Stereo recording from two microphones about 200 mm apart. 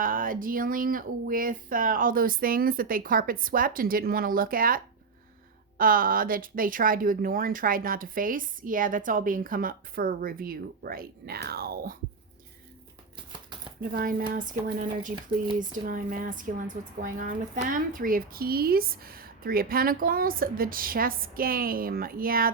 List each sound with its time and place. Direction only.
0.0 s speech: 45° right (ahead or behind)
13.9 s speech: 45° right (ahead or behind)